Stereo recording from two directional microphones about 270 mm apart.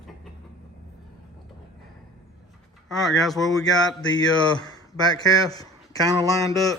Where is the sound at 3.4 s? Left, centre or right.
Centre.